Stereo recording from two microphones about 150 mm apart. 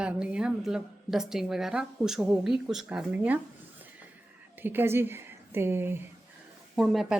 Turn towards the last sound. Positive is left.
turn(degrees=0)  # may be behind; listen again after turning